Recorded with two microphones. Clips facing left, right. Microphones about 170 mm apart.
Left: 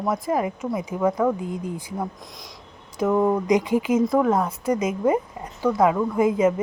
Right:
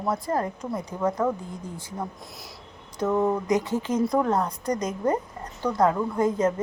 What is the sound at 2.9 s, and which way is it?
Speech, 10° left (ahead or behind).